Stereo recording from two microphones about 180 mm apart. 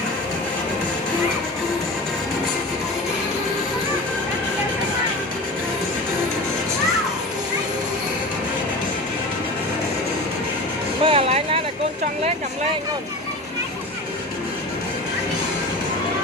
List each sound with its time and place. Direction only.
11.0 s music: 30° right (ahead or behind)